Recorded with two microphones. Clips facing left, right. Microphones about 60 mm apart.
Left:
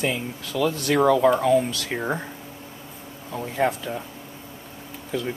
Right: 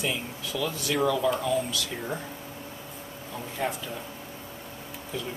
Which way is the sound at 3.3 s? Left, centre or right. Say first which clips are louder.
Left 8 dB; left.